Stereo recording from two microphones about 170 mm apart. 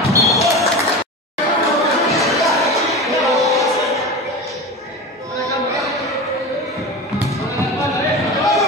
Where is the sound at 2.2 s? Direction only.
Centre (ahead or behind).